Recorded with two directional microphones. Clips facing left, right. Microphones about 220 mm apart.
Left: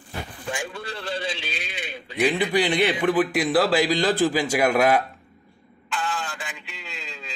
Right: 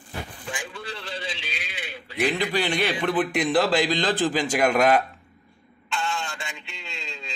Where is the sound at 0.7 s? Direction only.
45° left (ahead or behind).